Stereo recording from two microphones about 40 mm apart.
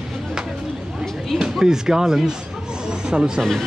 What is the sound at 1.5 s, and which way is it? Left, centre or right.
Speech, centre.